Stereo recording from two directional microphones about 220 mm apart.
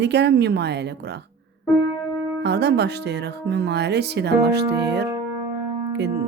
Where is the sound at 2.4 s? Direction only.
50° right (ahead or behind).